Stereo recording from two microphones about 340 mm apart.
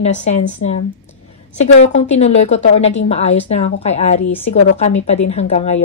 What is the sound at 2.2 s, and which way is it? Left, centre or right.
A woman's voice, centre.